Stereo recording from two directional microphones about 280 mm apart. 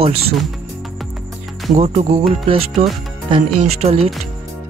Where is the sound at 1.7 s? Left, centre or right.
Right.